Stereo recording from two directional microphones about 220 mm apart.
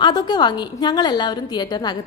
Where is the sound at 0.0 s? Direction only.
20° left (ahead or behind).